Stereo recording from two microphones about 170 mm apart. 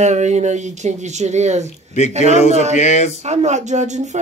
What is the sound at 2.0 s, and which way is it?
Speech, 40° left (ahead or behind).